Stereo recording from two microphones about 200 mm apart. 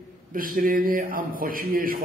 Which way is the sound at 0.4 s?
45° right (ahead or behind).